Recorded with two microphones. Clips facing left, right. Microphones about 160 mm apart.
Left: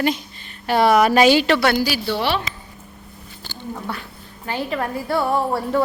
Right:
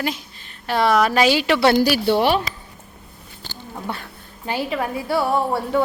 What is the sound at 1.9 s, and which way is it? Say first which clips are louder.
Speech: right 5 dB; 55° right (ahead or behind).